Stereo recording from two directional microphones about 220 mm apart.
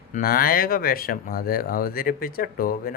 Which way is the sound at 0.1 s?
40° left (ahead or behind).